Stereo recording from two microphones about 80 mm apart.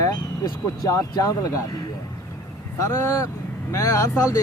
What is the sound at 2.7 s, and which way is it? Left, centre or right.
Speech, left.